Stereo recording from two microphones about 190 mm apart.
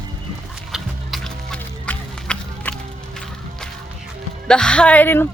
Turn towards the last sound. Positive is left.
turn(degrees=10)  # may be behind; listen again after turning